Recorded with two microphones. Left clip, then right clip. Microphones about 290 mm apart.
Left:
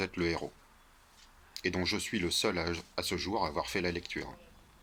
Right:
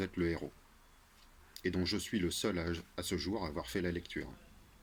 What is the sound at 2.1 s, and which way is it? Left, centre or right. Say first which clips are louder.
Speech: left 5 dB; left.